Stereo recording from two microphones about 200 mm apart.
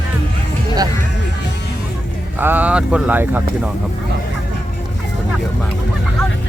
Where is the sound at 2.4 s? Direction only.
10° right (ahead or behind).